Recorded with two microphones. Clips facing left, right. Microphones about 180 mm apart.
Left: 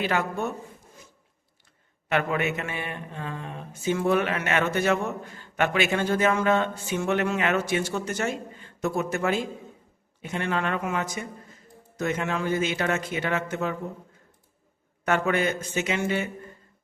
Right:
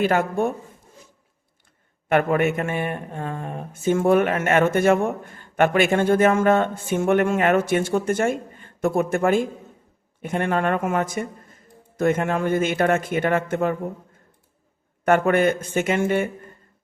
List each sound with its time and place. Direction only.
0.0 s a man's voice: 50° right (ahead or behind)
2.0 s a man's voice: 50° right (ahead or behind)
15.0 s a man's voice: 55° right (ahead or behind)